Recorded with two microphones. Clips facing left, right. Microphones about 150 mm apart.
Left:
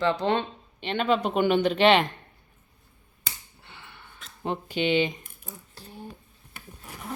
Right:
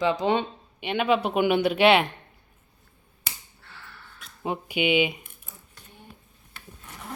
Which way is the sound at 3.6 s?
20° left (ahead or behind).